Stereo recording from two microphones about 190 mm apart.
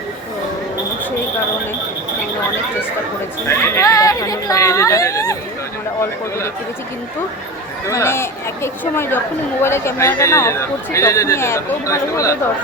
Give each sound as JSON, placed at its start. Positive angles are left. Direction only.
{"t": 3.4, "sound": "speech", "side_deg": 15}
{"t": 7.9, "sound": "speech", "side_deg": 15}